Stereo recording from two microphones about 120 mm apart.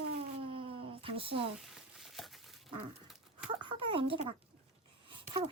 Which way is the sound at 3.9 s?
50° right (ahead or behind).